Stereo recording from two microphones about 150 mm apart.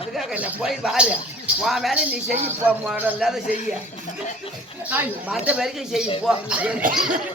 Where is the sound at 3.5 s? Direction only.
55° left (ahead or behind).